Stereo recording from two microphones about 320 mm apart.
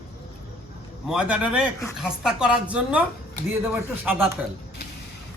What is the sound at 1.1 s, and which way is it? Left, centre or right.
Speech, centre.